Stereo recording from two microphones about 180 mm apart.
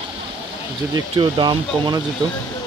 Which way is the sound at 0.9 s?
25° right (ahead or behind).